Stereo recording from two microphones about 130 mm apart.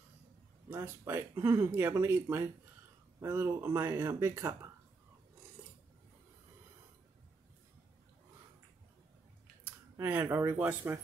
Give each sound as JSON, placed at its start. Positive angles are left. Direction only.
{"t": 0.7, "sound": "speech", "side_deg": -20}
{"t": 5.6, "sound": "filing", "side_deg": -15}
{"t": 9.9, "sound": "speech", "side_deg": -15}